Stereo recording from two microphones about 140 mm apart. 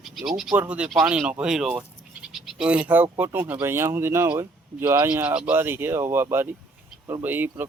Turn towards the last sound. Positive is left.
turn(degrees=-15)  # may be behind; listen again after turning